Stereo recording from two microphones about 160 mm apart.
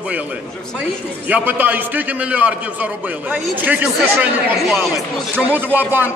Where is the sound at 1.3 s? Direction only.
10° right (ahead or behind).